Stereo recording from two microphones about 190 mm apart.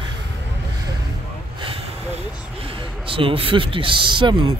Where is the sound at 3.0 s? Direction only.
30° right (ahead or behind).